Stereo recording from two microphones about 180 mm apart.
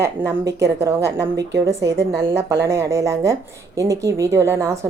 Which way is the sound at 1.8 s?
75° right (ahead or behind).